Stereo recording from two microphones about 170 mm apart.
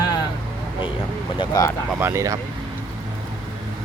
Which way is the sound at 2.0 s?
15° right (ahead or behind).